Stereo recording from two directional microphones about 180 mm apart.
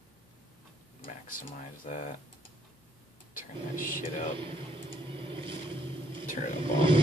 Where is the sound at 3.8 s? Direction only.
45° left (ahead or behind).